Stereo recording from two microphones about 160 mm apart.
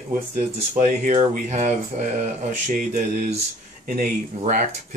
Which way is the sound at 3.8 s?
65° right (ahead or behind).